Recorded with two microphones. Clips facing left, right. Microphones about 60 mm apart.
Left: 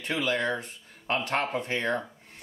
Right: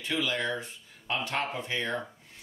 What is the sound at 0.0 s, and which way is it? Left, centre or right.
Speech, left.